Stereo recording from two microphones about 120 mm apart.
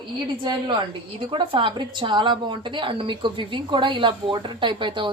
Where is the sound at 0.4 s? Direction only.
40° right (ahead or behind).